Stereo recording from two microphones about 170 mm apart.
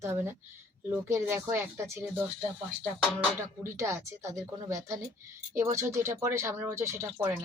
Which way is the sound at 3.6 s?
15° right (ahead or behind).